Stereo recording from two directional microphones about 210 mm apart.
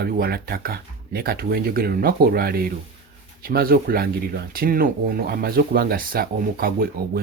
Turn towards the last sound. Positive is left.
turn(degrees=-45)  # may be behind; listen again after turning